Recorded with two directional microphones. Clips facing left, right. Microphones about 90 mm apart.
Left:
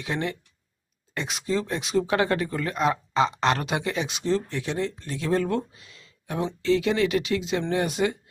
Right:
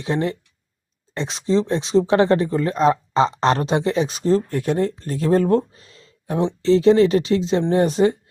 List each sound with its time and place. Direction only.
0.0 s speech: 30° right (ahead or behind)